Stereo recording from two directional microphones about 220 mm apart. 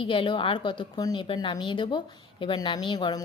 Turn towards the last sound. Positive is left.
turn(degrees=20)  # may be behind; listen again after turning